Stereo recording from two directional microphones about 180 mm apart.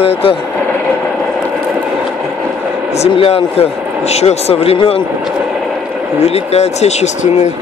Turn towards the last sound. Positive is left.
turn(degrees=35)  # may be behind; listen again after turning